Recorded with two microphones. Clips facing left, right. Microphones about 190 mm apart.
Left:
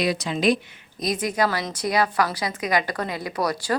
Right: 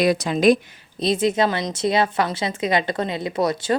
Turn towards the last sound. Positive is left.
turn(degrees=-25)  # may be behind; listen again after turning